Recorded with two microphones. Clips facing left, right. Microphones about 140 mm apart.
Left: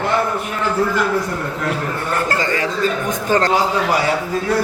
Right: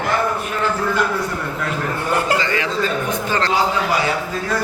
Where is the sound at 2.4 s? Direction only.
45° left (ahead or behind).